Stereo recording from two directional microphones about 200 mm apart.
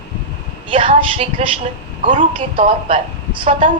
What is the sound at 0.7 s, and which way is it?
A woman's voice, 25° right (ahead or behind).